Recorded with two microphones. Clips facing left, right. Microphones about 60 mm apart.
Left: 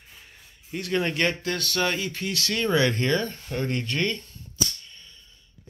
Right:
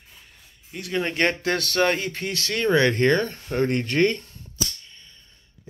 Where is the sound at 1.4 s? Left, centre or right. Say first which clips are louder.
Right 4 dB; right.